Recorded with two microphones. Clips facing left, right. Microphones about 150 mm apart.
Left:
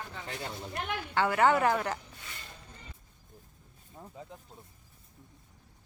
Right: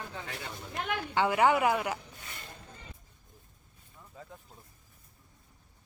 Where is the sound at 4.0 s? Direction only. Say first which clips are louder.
Left 8 dB; 40° left (ahead or behind).